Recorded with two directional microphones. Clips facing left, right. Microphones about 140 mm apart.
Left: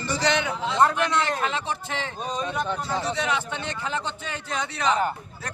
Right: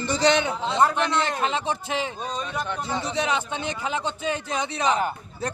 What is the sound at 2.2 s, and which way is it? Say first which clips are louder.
Speech: left 2 dB; 15° left (ahead or behind).